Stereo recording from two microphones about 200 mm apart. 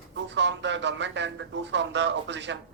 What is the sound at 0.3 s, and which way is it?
A man's voice, 65° right (ahead or behind).